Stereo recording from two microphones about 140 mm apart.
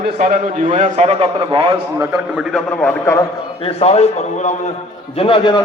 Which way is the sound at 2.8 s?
15° left (ahead or behind).